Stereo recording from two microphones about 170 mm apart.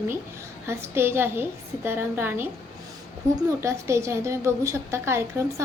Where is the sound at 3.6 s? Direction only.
15° right (ahead or behind).